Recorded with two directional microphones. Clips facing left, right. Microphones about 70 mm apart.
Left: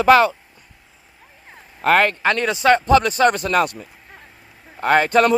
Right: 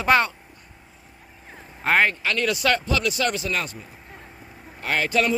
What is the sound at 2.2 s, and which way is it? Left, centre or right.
Speech, left.